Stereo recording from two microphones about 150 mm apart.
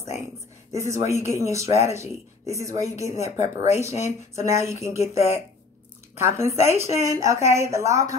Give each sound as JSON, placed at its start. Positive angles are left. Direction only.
{"t": 0.7, "sound": "speech", "side_deg": -20}